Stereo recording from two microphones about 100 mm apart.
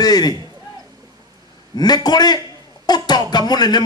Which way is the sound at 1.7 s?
45° left (ahead or behind).